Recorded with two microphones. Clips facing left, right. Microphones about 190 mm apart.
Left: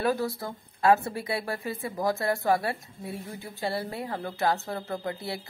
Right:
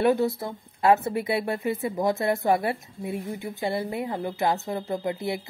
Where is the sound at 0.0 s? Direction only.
25° right (ahead or behind).